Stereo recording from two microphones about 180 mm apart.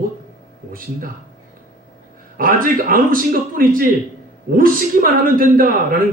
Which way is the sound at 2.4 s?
50° right (ahead or behind).